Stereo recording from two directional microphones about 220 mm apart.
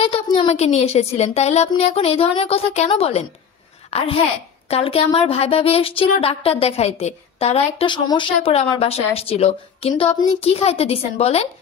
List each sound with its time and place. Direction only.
0.0 s a woman's voice: 25° left (ahead or behind)